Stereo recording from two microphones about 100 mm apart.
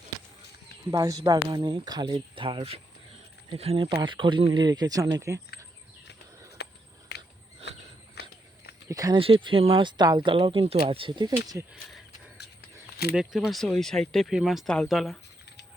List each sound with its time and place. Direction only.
0.9 s speech: 40° right (ahead or behind)
1.5 s speech: 50° right (ahead or behind); by 3.8 s 75° right (ahead or behind)
3.8 s speech: 55° right (ahead or behind); by 5.4 s 35° right (ahead or behind)
8.9 s speech: 35° right (ahead or behind)
9.1 s speech: 60° right (ahead or behind)
10.0 s speech: 45° right (ahead or behind)
10.3 s speech: 65° right (ahead or behind); by 11.5 s 45° right (ahead or behind)
11.7 s speech: centre (ahead or behind)
13.1 s speech: centre (ahead or behind)